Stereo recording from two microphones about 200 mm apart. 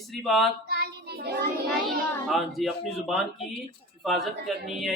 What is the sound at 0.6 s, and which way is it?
Child singing, 55° right (ahead or behind).